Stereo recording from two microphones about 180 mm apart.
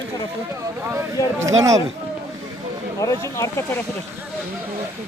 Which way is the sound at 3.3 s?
15° left (ahead or behind).